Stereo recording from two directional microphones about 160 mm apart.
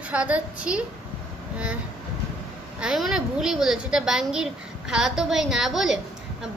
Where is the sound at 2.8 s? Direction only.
5° right (ahead or behind).